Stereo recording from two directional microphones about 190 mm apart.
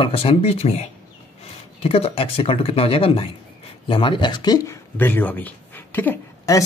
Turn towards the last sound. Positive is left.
turn(degrees=15)  # may be behind; listen again after turning